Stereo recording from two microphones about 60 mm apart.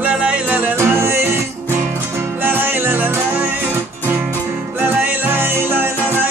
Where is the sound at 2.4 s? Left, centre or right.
Right.